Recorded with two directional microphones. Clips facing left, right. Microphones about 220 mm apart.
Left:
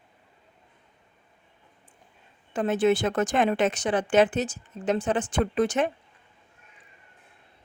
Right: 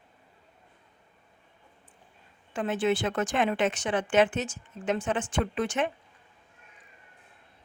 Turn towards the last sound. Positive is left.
turn(degrees=40)  # may be behind; listen again after turning